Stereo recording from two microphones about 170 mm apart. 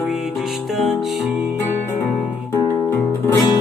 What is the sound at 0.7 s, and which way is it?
Music, centre (ahead or behind).